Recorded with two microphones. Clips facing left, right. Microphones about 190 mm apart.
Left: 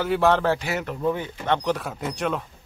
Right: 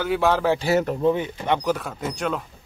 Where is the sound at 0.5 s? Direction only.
35° right (ahead or behind).